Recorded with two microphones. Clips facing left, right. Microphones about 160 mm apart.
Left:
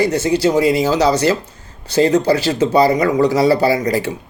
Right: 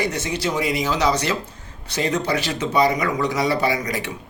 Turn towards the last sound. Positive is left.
turn(degrees=35)  # may be behind; listen again after turning